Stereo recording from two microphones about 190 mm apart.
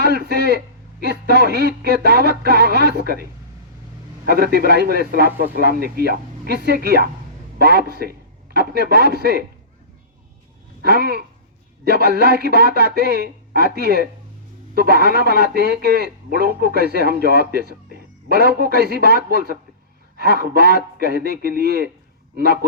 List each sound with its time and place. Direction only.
0.0 s a sound: 60° right (ahead or behind)
1.3 s speech: 60° right (ahead or behind)
4.3 s a man's voice: 55° right (ahead or behind)
10.8 s speech: 55° right (ahead or behind)